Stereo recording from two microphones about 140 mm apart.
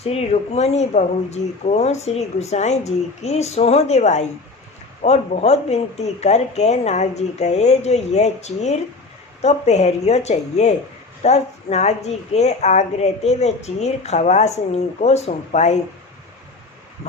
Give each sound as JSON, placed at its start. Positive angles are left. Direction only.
{"t": 0.0, "sound": "a woman's voice", "side_deg": 45}